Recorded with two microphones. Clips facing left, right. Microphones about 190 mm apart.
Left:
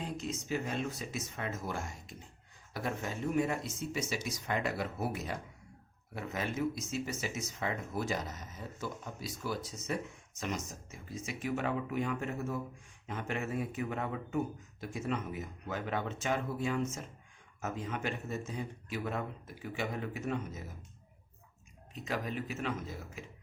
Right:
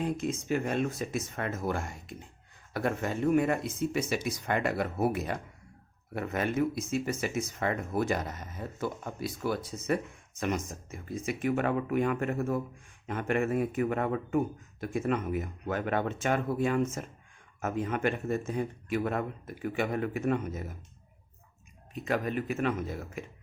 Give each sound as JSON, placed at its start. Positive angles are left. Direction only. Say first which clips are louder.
{"t": 0.0, "sound": "speech", "louder": "right 7 dB", "side_deg": -55}
{"t": 22.0, "sound": "speech", "louder": "right 6 dB", "side_deg": -55}